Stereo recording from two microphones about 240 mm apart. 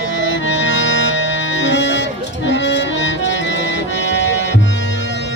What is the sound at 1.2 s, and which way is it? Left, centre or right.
Accordion, left.